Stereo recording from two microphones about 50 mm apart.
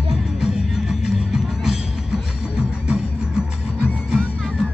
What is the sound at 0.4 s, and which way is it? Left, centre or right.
Music, centre.